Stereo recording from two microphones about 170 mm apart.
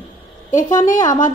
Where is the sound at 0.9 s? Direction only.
20° left (ahead or behind).